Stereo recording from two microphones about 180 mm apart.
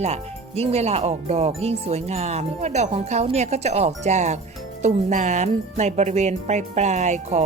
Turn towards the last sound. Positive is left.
turn(degrees=-40)  # may be behind; listen again after turning